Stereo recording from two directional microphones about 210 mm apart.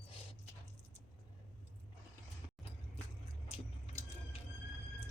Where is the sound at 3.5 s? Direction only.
30° left (ahead or behind).